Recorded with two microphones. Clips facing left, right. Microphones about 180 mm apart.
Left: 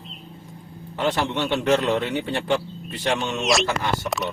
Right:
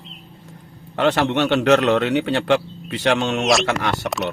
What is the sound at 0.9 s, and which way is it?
Speech, 80° right.